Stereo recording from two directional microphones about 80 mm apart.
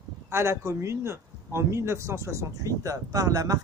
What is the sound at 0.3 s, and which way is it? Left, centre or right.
Speech, right.